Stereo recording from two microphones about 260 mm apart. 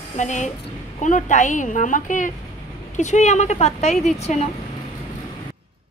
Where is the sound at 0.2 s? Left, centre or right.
Left.